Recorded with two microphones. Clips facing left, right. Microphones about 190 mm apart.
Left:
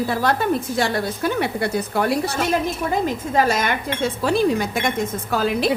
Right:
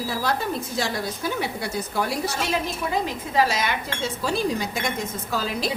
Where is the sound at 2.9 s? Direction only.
50° left (ahead or behind).